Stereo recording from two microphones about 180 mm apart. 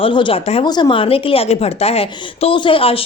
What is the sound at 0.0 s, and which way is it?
A woman's voice, 30° left (ahead or behind).